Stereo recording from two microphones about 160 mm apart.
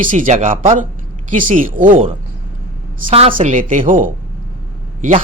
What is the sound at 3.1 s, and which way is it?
Speech, 40° right (ahead or behind).